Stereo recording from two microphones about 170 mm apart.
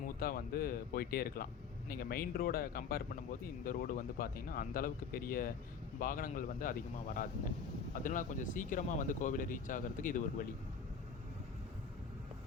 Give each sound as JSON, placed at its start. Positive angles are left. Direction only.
{"t": 0.0, "sound": "speech", "side_deg": 60}